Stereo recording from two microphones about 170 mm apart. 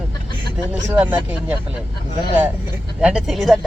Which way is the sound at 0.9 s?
10° right (ahead or behind).